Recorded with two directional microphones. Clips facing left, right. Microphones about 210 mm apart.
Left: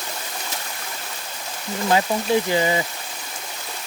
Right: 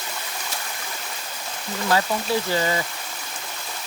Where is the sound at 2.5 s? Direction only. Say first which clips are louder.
Left 3 dB; 15° left (ahead or behind).